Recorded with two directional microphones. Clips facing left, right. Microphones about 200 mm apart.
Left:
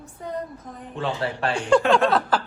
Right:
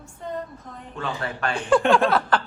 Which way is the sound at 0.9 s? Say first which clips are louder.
Left 3 dB; 30° left (ahead or behind).